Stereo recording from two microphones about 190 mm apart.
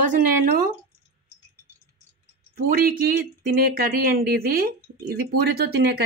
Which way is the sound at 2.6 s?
50° right (ahead or behind).